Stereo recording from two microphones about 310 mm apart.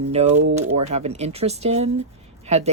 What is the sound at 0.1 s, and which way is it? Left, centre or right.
Speech, right.